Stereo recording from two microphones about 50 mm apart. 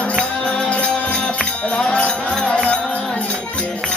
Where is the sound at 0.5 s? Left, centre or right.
Left.